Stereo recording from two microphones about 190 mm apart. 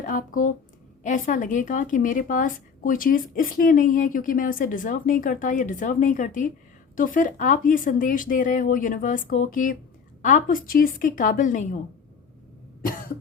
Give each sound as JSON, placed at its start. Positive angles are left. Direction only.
{"t": 0.0, "sound": "speech", "side_deg": 45}